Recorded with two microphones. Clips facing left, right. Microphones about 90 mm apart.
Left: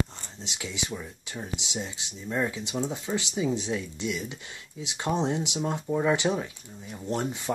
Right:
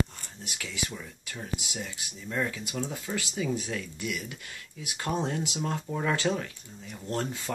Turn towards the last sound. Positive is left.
turn(degrees=20)  # may be behind; listen again after turning